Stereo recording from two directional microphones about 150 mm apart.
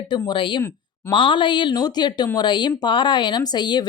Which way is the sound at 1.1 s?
35° left (ahead or behind).